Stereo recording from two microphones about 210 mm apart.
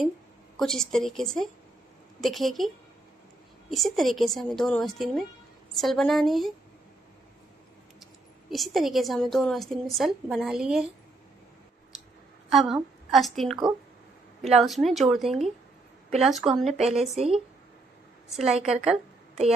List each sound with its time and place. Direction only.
0.6 s speech: 5° left (ahead or behind)
3.7 s speech: centre (ahead or behind)
8.0 s speech: centre (ahead or behind)
12.4 s a woman's voice: centre (ahead or behind)
16.7 s a woman's voice: 30° right (ahead or behind)
18.3 s speech: centre (ahead or behind)